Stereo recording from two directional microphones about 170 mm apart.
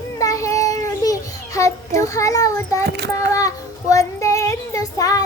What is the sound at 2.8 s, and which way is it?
Speech, 70° right (ahead or behind).